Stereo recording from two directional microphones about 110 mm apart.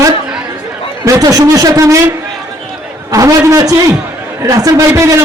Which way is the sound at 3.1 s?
30° right (ahead or behind).